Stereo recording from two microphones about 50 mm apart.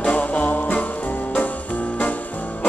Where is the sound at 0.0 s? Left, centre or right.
Left.